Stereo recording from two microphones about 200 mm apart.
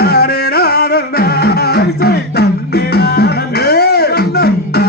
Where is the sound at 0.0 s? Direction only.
50° left (ahead or behind).